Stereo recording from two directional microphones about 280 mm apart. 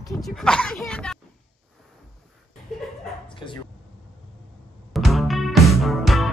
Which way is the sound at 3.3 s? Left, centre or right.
Centre.